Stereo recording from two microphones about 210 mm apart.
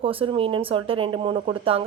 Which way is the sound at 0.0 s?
25° right (ahead or behind).